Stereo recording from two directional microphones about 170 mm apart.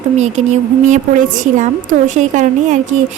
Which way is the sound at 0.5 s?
45° right (ahead or behind).